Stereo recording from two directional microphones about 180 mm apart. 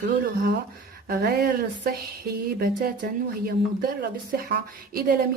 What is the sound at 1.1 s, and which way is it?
Speech, 60° right (ahead or behind).